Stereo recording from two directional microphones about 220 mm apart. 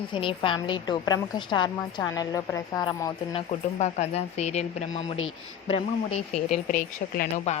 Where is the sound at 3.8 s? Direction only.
30° left (ahead or behind).